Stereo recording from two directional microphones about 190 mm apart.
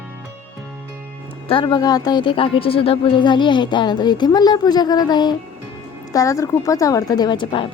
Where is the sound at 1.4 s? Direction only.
25° left (ahead or behind).